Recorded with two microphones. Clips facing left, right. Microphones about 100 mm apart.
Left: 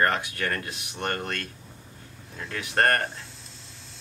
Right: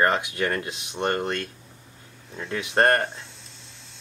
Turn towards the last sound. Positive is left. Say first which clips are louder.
# left 1 dB
turn(degrees=0)  # may be behind; listen again after turning